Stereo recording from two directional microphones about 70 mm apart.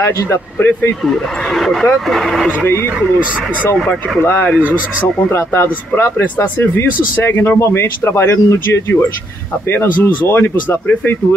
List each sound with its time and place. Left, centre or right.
0.0 s speech: left
1.0 s speech: centre
2.6 s speech: left
3.7 s speech: centre
4.2 s speech: left
4.6 s speech: right
5.3 s speech: left
6.1 s speech: left
9.7 s speech: left